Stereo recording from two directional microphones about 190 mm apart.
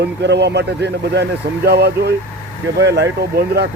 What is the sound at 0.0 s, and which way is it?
Speech, 65° right (ahead or behind).